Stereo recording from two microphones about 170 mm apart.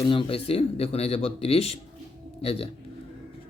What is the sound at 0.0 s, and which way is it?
Speech, 30° left (ahead or behind).